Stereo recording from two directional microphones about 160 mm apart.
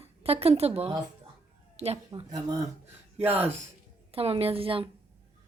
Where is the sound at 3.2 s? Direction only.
10° right (ahead or behind).